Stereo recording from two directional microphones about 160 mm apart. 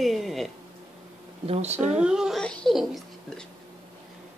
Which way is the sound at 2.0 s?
5° right (ahead or behind).